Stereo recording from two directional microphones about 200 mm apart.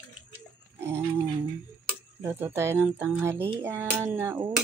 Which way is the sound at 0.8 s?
15° right (ahead or behind).